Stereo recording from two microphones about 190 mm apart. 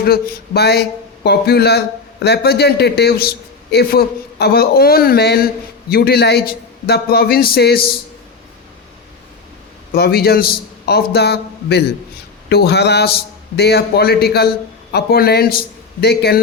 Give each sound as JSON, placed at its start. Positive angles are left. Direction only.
{"t": 0.0, "sound": "speech", "side_deg": 55}
{"t": 9.9, "sound": "a man's voice", "side_deg": 55}